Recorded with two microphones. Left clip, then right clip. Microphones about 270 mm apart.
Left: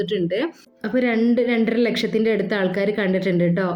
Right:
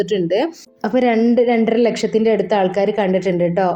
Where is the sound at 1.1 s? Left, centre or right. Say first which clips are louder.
Right 5 dB; centre.